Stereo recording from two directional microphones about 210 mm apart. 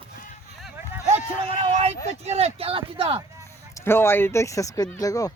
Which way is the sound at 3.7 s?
10° left (ahead or behind).